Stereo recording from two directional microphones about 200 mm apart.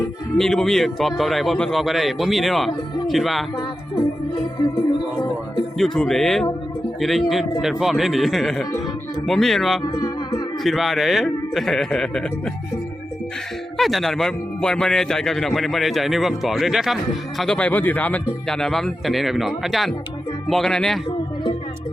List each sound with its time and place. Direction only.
0.3 s speech: centre (ahead or behind)
5.7 s speech: centre (ahead or behind)
9.9 s music: 20° left (ahead or behind)
10.6 s speech: centre (ahead or behind)
13.7 s speech: centre (ahead or behind)